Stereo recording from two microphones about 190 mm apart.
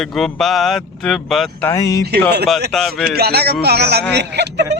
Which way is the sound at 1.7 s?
15° left (ahead or behind).